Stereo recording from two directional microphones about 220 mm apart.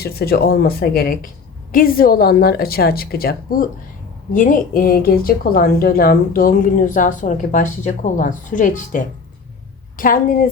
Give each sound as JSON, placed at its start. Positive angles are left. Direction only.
{"t": 0.0, "sound": "a woman's voice", "side_deg": 45}
{"t": 10.0, "sound": "speech", "side_deg": 40}